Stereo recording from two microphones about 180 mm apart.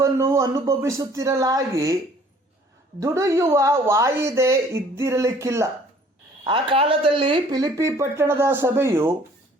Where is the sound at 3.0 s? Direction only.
15° right (ahead or behind).